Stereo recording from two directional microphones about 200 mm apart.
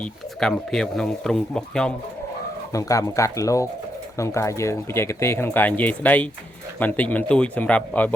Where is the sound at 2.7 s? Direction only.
15° left (ahead or behind).